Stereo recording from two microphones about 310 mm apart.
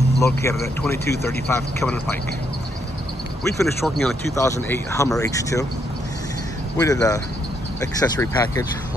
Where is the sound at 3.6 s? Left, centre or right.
Centre.